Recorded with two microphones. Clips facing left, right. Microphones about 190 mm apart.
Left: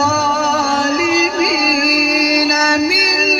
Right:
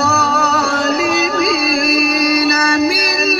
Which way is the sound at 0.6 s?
55° right (ahead or behind).